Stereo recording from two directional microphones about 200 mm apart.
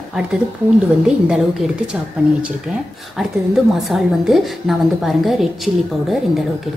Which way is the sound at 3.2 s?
Centre (ahead or behind).